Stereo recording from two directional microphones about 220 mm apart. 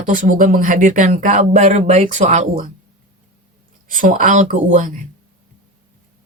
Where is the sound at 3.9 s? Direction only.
35° right (ahead or behind).